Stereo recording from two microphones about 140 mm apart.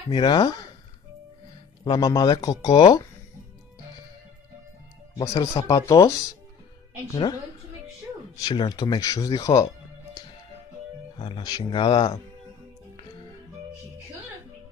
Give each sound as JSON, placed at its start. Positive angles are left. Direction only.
{"t": 0.1, "sound": "speech", "side_deg": 35}
{"t": 1.9, "sound": "speech", "side_deg": 25}
{"t": 5.1, "sound": "speech", "side_deg": 25}
{"t": 8.4, "sound": "speech", "side_deg": 30}
{"t": 11.1, "sound": "speech", "side_deg": 35}